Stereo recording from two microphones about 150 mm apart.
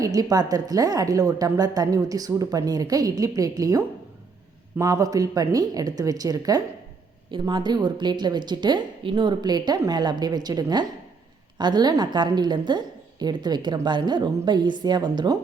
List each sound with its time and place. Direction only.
0.0 s a woman's voice: 25° right (ahead or behind)